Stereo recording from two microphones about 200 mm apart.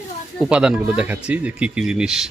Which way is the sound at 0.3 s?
5° right (ahead or behind).